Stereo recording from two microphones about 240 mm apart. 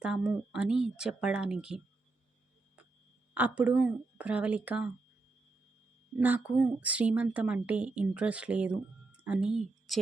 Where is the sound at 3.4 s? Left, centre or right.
Centre.